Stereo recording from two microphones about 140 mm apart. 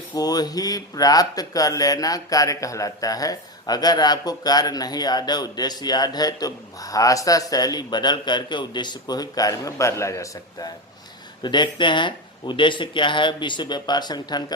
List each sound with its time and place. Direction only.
0.1 s speech: 25° left (ahead or behind)